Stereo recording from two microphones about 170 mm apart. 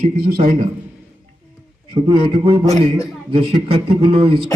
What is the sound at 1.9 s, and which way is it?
Speech, 30° right (ahead or behind).